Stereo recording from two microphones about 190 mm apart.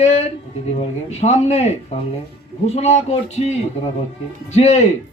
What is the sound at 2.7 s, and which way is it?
A man's voice, 35° left (ahead or behind).